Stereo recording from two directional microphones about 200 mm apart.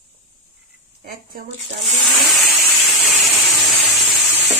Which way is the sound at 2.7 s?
Centre (ahead or behind).